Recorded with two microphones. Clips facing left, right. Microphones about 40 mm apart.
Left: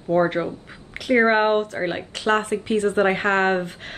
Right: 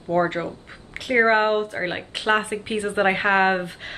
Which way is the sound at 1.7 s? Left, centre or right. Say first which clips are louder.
Left 1 dB; centre.